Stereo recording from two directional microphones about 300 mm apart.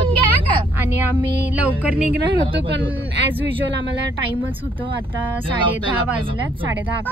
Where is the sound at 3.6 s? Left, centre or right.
Right.